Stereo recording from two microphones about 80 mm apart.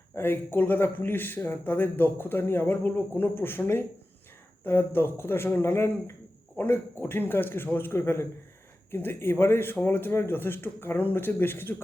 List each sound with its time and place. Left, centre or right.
0.1 s a man's voice: left